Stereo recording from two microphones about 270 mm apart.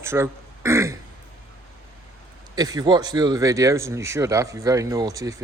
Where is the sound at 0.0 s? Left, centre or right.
Centre.